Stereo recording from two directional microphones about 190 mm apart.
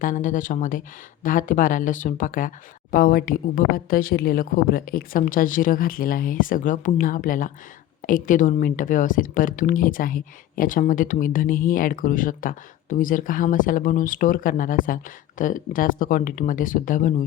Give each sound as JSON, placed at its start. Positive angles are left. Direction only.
{"t": 0.0, "sound": "speech", "side_deg": 45}